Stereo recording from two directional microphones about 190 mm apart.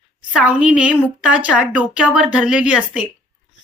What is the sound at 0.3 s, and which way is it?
A woman's voice, 5° right (ahead or behind).